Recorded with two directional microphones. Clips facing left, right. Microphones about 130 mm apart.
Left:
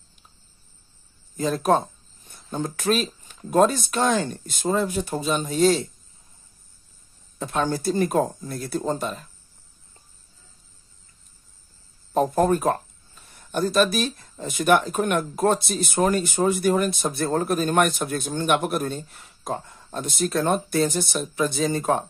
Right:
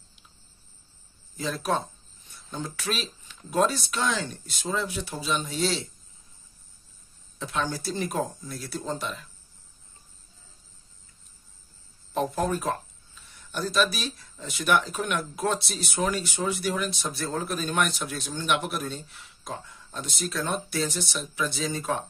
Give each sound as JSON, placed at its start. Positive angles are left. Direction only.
{"t": 1.3, "sound": "speech", "side_deg": 45}
{"t": 7.3, "sound": "speech", "side_deg": 50}
{"t": 12.1, "sound": "speech", "side_deg": 45}